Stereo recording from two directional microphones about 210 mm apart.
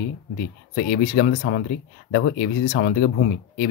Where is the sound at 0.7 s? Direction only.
45° left (ahead or behind).